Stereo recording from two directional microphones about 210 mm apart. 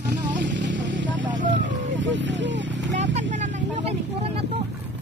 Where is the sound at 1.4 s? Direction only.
60° right (ahead or behind).